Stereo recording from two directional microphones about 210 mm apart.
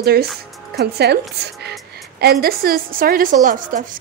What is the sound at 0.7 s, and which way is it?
Speech, 50° right (ahead or behind).